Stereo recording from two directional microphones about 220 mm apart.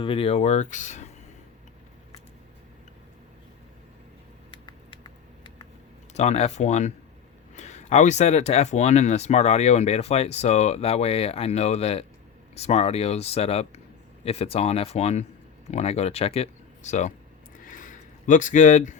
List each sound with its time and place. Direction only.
0.0 s speech: 25° left (ahead or behind)
6.1 s speech: 30° left (ahead or behind)
17.6 s a sound: 35° left (ahead or behind)